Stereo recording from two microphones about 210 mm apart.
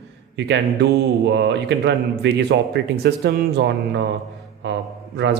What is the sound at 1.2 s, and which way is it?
A man's voice, 55° right (ahead or behind).